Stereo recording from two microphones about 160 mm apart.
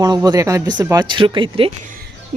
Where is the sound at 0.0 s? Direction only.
25° right (ahead or behind).